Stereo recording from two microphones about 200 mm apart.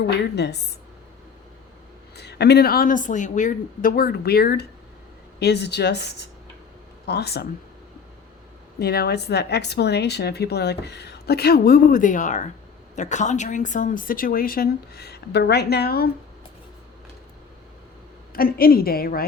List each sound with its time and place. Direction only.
0.2 s speech: 55° left (ahead or behind)
2.1 s a woman's voice: 55° left (ahead or behind)
8.8 s a woman's voice: 55° left (ahead or behind)
18.3 s a woman's voice: 45° left (ahead or behind)